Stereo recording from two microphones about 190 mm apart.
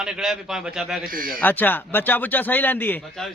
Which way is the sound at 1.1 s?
50° right (ahead or behind).